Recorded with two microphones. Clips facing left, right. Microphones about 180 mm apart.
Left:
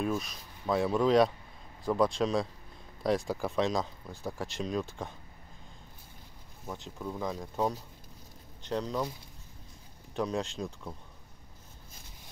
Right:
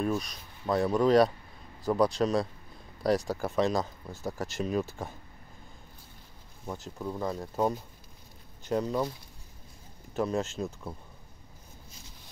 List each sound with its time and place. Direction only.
0.0 s speech: centre (ahead or behind)
6.7 s speech: 5° right (ahead or behind)
10.1 s speech: 5° right (ahead or behind)